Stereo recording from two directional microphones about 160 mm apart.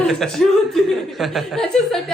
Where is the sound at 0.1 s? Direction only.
Centre (ahead or behind).